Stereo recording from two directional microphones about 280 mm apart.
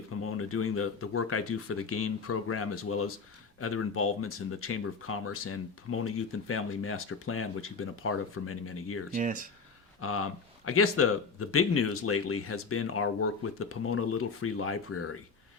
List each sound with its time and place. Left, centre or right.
0.2 s speech: left
9.1 s speech: right
10.0 s speech: left